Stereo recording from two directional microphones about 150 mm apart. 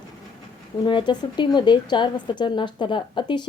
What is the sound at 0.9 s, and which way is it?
A woman's voice, 30° left (ahead or behind).